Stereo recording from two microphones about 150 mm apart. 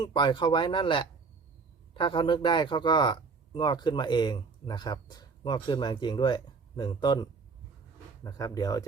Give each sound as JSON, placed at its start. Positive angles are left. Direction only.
{"t": 0.0, "sound": "speech", "side_deg": 30}